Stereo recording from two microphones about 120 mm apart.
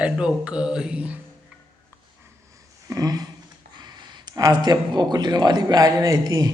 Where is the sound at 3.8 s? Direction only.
35° right (ahead or behind).